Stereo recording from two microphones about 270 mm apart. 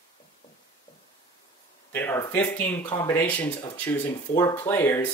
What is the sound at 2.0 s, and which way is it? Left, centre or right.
Speech, centre.